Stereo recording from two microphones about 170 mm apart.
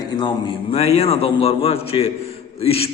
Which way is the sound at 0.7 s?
35° left (ahead or behind).